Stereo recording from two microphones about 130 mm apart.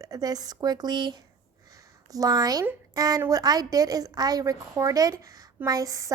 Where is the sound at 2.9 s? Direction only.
30° right (ahead or behind).